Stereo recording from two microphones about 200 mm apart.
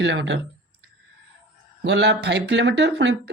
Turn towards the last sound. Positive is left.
turn(degrees=-60)  # may be behind; listen again after turning